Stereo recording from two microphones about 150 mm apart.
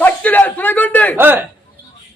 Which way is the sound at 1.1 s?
15° right (ahead or behind).